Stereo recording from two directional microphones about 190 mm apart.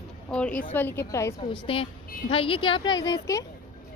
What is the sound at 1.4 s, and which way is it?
Speech, 30° left (ahead or behind).